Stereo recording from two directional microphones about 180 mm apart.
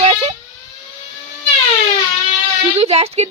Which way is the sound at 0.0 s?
30° right (ahead or behind).